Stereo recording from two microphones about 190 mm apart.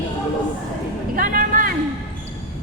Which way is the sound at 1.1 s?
50° right (ahead or behind).